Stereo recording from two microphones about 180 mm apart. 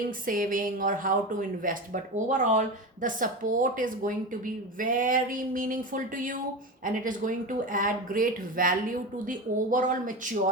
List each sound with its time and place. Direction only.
0.3 s speech: 50° right (ahead or behind)